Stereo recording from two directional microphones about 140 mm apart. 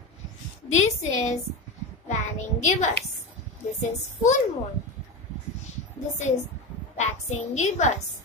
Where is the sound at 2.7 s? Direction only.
55° left (ahead or behind).